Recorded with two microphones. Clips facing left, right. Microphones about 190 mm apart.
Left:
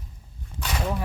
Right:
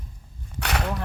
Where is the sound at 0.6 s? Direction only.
70° right (ahead or behind).